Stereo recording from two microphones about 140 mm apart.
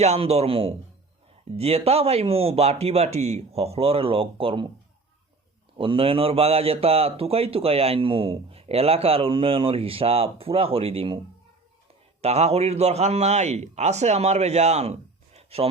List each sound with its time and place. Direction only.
0.0 s a man's voice: 50° right (ahead or behind)
5.7 s a man's voice: 40° right (ahead or behind)
12.2 s a man's voice: 50° right (ahead or behind)